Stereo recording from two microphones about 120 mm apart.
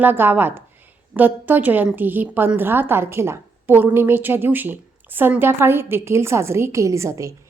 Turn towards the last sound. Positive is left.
turn(degrees=-25)  # may be behind; listen again after turning